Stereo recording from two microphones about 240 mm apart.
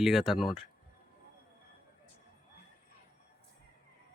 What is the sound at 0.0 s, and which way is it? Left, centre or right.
Speech, centre.